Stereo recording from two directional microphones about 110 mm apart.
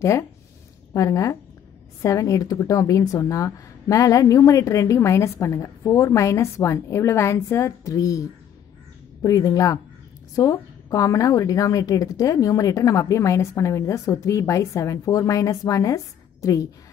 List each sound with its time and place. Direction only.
0.0 s a woman's voice: 25° left (ahead or behind)